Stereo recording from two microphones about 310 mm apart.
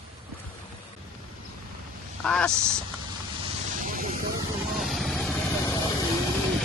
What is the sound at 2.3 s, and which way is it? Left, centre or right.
Speech, centre.